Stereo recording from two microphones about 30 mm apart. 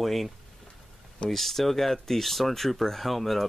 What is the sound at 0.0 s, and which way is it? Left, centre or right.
Speech, centre.